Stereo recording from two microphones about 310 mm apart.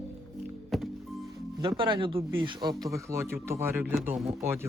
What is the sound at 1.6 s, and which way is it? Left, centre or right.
Speech, centre.